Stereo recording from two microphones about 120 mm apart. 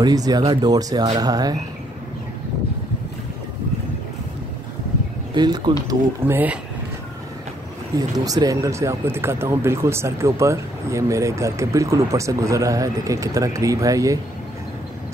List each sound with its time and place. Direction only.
0.0 s speech: 30° right (ahead or behind)
5.3 s speech: 35° right (ahead or behind)
5.9 s speech: 20° right (ahead or behind)
8.2 s speech: 30° right (ahead or behind)